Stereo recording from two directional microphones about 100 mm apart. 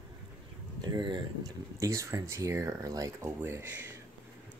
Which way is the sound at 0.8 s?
50° right (ahead or behind).